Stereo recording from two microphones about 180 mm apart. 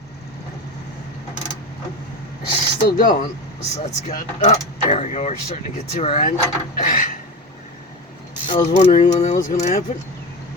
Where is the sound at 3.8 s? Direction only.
40° left (ahead or behind).